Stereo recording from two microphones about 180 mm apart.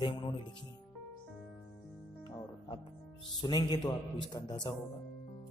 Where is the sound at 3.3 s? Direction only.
25° left (ahead or behind).